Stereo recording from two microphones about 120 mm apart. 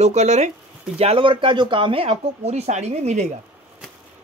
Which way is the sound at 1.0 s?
50° right (ahead or behind).